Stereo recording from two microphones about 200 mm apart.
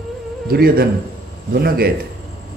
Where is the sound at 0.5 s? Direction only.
50° right (ahead or behind).